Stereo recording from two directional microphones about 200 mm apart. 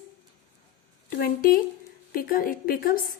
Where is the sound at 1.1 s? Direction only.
45° left (ahead or behind).